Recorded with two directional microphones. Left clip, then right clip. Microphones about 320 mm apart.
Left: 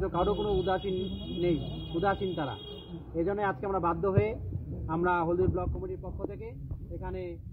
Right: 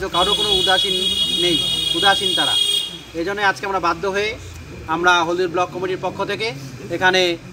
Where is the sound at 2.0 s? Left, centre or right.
Centre.